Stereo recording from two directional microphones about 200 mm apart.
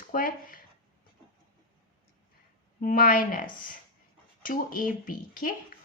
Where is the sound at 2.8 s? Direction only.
45° left (ahead or behind).